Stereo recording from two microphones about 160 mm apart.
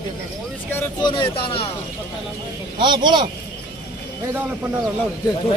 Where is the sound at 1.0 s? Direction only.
30° left (ahead or behind).